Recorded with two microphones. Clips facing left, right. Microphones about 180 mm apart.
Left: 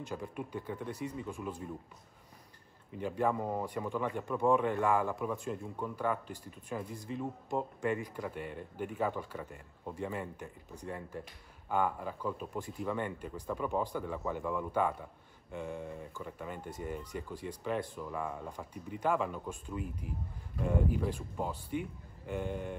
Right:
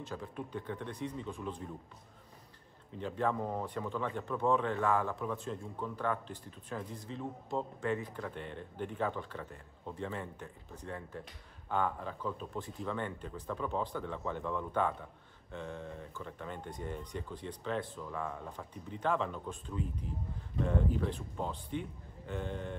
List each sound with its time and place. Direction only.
0.0 s speech: 15° left (ahead or behind)
3.0 s speech: 10° left (ahead or behind)